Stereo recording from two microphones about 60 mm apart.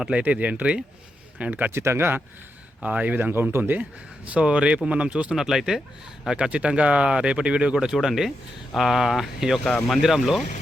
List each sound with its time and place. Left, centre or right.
0.2 s speech: right
1.7 s speech: right
2.8 s speech: right
3.3 s speech: right
3.6 s speech: right
5.4 s speech: centre